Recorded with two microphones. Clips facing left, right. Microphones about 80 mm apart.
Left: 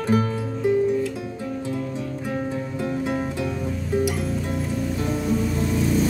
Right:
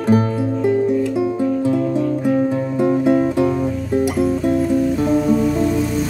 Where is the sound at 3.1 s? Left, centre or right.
Right.